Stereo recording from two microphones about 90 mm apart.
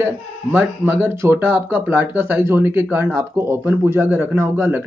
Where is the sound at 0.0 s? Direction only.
20° right (ahead or behind).